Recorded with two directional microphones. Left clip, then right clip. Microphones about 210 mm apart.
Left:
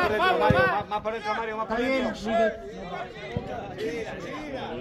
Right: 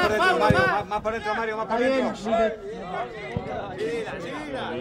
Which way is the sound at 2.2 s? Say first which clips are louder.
Even; 45° left (ahead or behind).